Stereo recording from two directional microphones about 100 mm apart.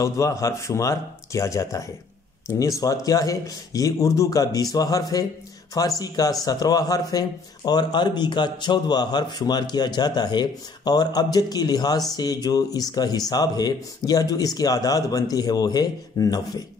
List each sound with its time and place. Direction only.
0.0 s speech: 35° left (ahead or behind)
3.1 s a man's voice: 35° left (ahead or behind)